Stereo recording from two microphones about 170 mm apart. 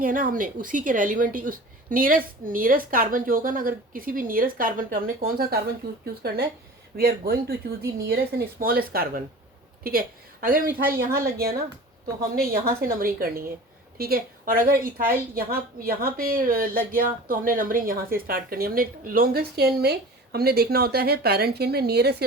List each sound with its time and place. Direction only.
0.0 s a woman's voice: 55° right (ahead or behind)
5.8 s a woman's voice: 70° right (ahead or behind)